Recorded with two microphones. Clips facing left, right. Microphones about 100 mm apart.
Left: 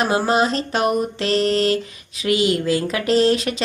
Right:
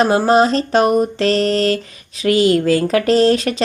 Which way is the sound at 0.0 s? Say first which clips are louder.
Right 5 dB; 40° right (ahead or behind).